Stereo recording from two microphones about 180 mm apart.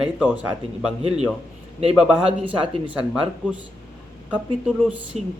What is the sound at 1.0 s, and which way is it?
Speech, 35° right (ahead or behind).